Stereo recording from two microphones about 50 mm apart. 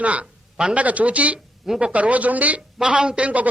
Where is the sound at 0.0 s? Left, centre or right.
Right.